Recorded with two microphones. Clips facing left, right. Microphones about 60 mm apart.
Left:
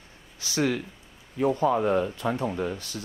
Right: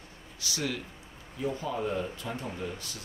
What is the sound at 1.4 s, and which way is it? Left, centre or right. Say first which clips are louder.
Speech: left 9 dB; left.